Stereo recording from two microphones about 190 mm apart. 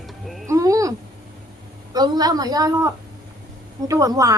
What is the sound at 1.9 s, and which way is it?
Speech, 20° right (ahead or behind).